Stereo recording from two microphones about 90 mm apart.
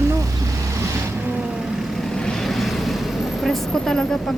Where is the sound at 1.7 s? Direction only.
5° left (ahead or behind).